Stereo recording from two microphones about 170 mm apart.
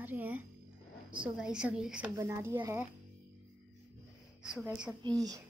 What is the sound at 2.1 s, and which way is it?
Speech, 15° right (ahead or behind).